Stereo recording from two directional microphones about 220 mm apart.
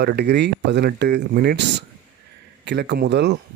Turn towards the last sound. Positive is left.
turn(degrees=-50)  # may be behind; listen again after turning